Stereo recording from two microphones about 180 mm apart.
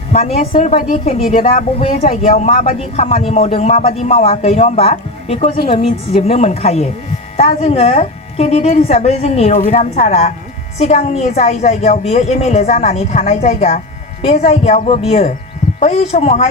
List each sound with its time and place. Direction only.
0.3 s a woman's voice: 50° left (ahead or behind)